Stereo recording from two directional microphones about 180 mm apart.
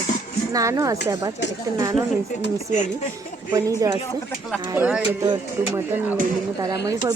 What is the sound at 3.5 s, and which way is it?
Speech, 20° right (ahead or behind).